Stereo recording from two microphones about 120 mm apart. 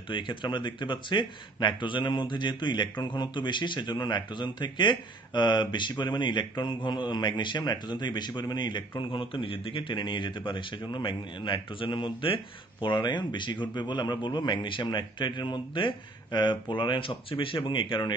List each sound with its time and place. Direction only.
0.1 s speech: 40° left (ahead or behind)